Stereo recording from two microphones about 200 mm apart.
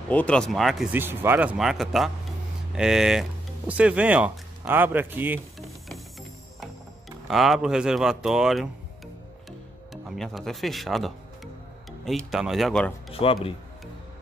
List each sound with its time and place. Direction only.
0.1 s speech: 5° left (ahead or behind)
7.2 s speech: centre (ahead or behind)
13.1 s speech: 30° left (ahead or behind)